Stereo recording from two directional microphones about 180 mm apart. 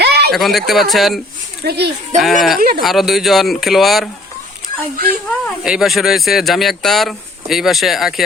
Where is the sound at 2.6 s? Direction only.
60° right (ahead or behind).